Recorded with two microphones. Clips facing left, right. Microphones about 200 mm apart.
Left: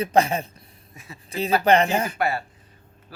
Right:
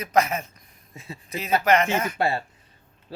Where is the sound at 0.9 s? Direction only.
25° right (ahead or behind).